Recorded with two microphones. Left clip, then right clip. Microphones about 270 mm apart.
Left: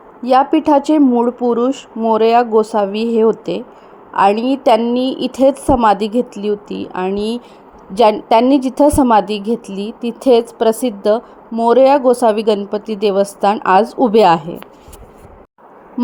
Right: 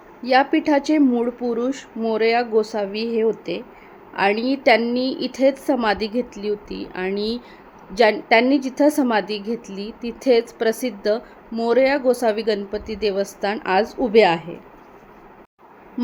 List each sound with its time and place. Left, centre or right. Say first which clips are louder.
0.2 s a woman's voice: left 5 dB; centre